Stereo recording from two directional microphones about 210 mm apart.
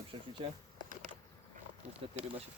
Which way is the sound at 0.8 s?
35° right (ahead or behind).